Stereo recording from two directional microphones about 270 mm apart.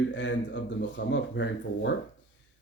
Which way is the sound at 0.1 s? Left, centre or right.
Left.